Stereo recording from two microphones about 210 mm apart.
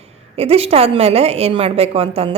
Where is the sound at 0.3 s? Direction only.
30° right (ahead or behind).